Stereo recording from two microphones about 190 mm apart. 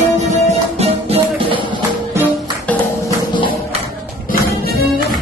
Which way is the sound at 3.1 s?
25° left (ahead or behind).